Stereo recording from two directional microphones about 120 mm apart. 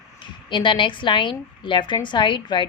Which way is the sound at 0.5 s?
40° left (ahead or behind).